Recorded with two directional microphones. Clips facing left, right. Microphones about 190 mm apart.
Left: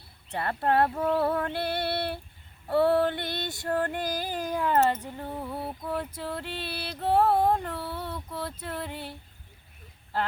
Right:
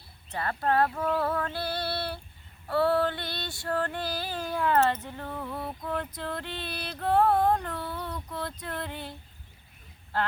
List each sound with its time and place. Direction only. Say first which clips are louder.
0.3 s female singing: left 1 dB; 25° left (ahead or behind); by 9.1 s 5° left (ahead or behind)